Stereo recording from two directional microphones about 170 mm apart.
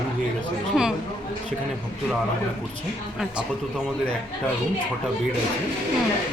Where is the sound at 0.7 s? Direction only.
5° right (ahead or behind).